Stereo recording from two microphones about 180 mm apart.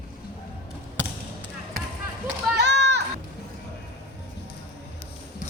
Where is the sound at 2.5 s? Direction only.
75° right (ahead or behind).